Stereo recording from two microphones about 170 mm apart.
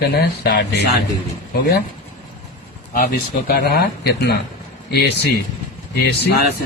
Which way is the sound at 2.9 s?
55° left (ahead or behind).